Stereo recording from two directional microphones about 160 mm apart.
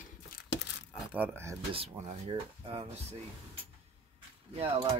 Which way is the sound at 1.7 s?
40° right (ahead or behind).